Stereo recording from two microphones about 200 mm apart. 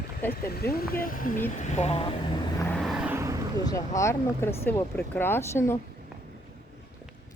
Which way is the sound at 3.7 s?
15° left (ahead or behind).